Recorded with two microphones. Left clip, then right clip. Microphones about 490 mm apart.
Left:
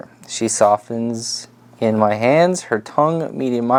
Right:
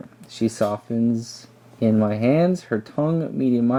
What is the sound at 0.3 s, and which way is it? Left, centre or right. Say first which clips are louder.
Speech: left 9 dB; left.